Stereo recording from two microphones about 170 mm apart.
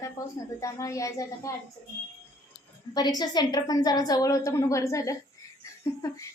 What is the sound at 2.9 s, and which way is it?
A woman's voice, 25° left (ahead or behind).